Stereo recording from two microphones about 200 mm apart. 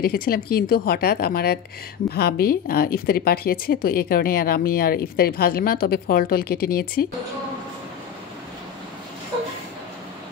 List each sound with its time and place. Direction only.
0.0 s a woman's voice: 50° left (ahead or behind)